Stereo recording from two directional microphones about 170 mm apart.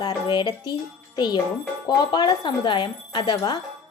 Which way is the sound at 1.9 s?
25° left (ahead or behind).